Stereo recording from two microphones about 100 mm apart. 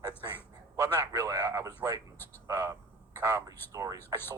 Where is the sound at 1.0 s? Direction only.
30° right (ahead or behind).